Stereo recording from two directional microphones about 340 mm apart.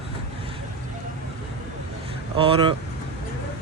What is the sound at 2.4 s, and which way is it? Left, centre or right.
Speech, centre.